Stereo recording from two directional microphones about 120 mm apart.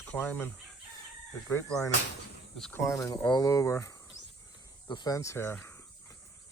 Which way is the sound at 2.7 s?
25° left (ahead or behind).